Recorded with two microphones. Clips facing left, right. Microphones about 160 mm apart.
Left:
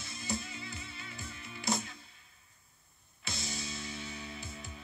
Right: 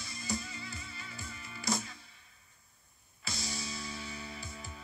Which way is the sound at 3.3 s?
25° left (ahead or behind).